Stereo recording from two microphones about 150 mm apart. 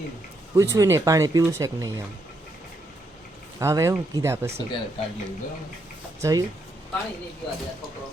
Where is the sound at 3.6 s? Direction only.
20° right (ahead or behind).